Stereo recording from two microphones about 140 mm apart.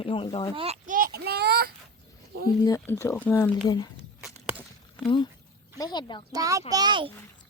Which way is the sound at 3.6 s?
30° left (ahead or behind).